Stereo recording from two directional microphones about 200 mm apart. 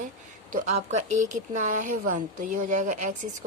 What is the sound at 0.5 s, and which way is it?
Speech, 35° right (ahead or behind).